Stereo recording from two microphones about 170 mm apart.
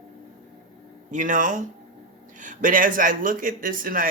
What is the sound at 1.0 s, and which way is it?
Speech, 50° right (ahead or behind).